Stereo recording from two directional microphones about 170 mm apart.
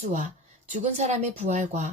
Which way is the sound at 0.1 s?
45° right (ahead or behind).